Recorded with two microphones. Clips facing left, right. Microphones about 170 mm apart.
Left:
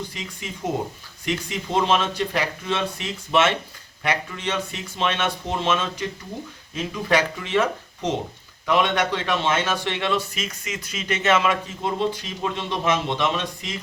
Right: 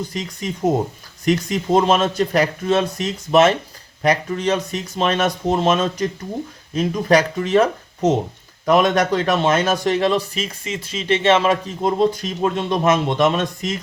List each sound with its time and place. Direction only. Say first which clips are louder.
0.1 s a man's voice: right 8 dB; 40° right (ahead or behind)